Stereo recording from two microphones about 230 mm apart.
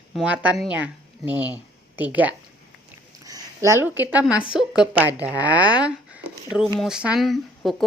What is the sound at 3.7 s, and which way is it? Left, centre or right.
A woman's voice, centre.